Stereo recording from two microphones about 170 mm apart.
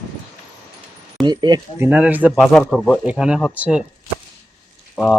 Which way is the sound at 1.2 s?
25° right (ahead or behind).